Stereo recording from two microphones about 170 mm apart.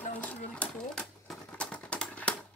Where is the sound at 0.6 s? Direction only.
5° left (ahead or behind).